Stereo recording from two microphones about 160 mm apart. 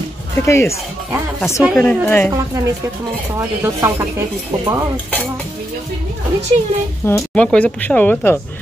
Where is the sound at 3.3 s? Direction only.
15° right (ahead or behind).